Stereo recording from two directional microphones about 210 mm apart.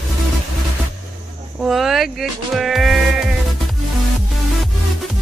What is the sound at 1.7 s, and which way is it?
Sheep, centre (ahead or behind).